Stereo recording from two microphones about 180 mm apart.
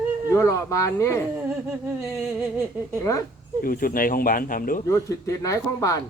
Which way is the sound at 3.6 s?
50° left (ahead or behind).